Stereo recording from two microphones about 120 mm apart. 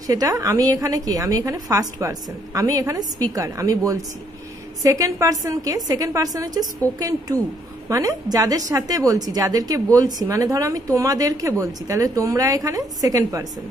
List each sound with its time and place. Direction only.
0.0 s a woman's voice: 30° right (ahead or behind)